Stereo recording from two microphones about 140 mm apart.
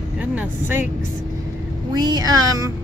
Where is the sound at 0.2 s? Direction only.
10° right (ahead or behind).